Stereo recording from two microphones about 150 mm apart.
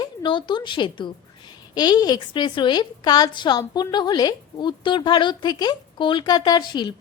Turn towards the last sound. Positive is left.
turn(degrees=30)  # may be behind; listen again after turning